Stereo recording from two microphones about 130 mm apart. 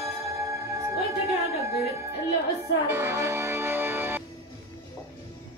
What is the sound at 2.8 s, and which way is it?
Music, 20° right (ahead or behind).